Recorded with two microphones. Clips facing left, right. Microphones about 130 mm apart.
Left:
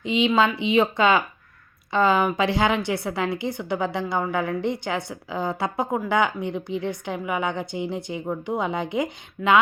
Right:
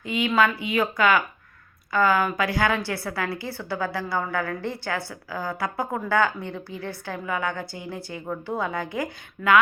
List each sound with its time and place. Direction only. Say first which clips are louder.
0.0 s a woman's voice: left 2 dB; 20° left (ahead or behind)